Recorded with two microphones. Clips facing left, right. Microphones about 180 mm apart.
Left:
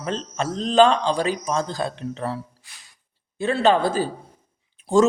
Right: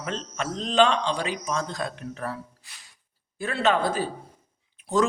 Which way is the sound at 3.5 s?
30° left (ahead or behind).